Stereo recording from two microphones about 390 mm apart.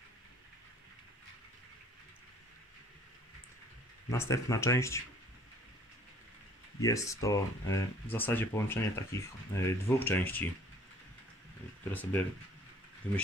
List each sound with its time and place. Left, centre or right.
4.1 s speech: centre
6.8 s speech: centre
11.9 s speech: centre